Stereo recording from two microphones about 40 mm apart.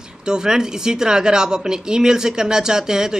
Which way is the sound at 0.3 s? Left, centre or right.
Centre.